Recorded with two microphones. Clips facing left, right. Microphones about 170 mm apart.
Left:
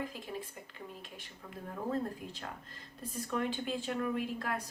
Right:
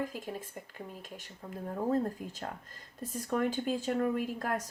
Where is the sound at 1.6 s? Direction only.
40° right (ahead or behind).